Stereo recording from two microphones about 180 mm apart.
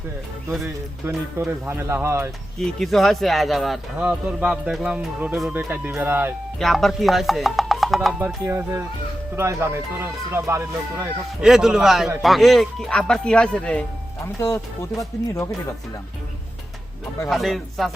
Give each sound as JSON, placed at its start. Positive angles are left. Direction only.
{"t": 0.6, "sound": "speech", "side_deg": -15}
{"t": 2.6, "sound": "speech", "side_deg": 0}
{"t": 6.6, "sound": "speech", "side_deg": 0}
{"t": 8.4, "sound": "speech", "side_deg": -15}
{"t": 11.4, "sound": "speech", "side_deg": 0}
{"t": 14.3, "sound": "speech", "side_deg": 15}
{"t": 17.2, "sound": "speech", "side_deg": 0}